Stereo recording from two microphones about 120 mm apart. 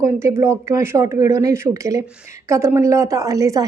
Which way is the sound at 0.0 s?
25° right (ahead or behind).